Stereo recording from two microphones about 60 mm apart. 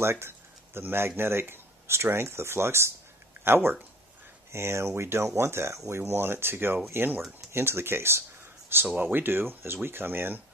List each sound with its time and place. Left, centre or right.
0.0 s speech: right
8.8 s speech: centre
9.1 s speech: right